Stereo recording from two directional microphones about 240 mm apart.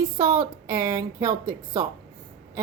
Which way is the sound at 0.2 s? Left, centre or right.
Centre.